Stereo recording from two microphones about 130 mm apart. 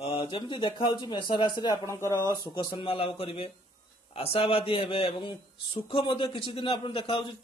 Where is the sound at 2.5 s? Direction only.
35° left (ahead or behind).